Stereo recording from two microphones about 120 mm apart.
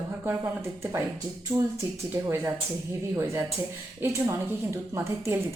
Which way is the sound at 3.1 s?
25° right (ahead or behind).